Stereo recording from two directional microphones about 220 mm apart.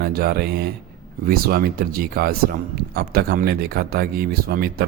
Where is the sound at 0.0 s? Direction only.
45° right (ahead or behind).